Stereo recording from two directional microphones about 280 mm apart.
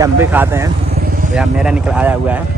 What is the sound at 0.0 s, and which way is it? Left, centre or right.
Speech, centre.